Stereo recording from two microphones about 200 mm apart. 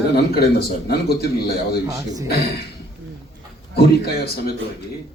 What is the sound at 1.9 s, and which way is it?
Speech, 15° right (ahead or behind).